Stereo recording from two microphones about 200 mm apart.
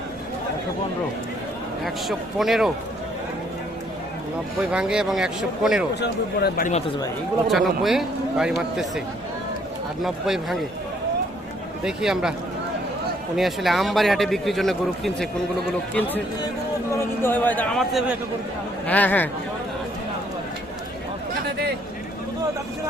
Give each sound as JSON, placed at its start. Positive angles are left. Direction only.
{"t": 1.8, "sound": "a man's voice", "side_deg": 0}
{"t": 4.7, "sound": "a man's voice", "side_deg": -5}
{"t": 6.0, "sound": "speech", "side_deg": 55}
{"t": 7.4, "sound": "a man's voice", "side_deg": 0}
{"t": 10.0, "sound": "a man's voice", "side_deg": 0}
{"t": 11.9, "sound": "a man's voice", "side_deg": -5}
{"t": 13.3, "sound": "a man's voice", "side_deg": 0}